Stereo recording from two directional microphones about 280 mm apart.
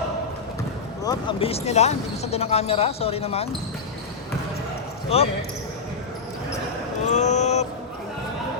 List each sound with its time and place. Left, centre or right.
1.0 s speech: centre
5.0 s speech: left
7.0 s speech: left